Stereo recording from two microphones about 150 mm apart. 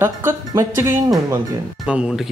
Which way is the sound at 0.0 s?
15° right (ahead or behind).